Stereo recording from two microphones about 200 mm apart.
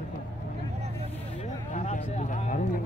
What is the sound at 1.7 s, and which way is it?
Speech, 35° left (ahead or behind).